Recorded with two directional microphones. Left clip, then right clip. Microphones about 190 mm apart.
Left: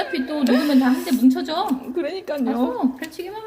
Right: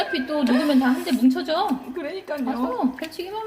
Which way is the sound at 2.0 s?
50° left (ahead or behind).